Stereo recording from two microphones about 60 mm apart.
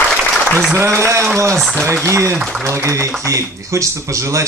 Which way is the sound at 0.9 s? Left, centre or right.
Right.